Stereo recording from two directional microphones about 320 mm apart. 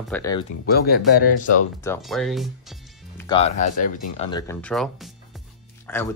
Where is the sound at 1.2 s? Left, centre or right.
Left.